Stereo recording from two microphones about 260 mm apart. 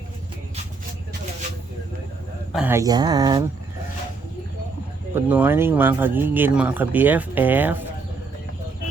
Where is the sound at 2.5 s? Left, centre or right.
Centre.